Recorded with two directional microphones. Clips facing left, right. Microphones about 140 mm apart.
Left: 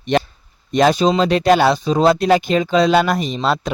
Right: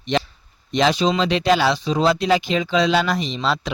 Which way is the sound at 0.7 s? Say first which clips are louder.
Left 4 dB; 45° left (ahead or behind).